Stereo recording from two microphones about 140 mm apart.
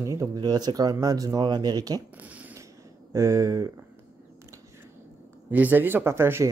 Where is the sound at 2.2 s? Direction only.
10° right (ahead or behind).